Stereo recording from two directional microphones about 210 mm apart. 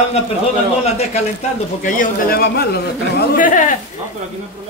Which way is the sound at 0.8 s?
30° left (ahead or behind).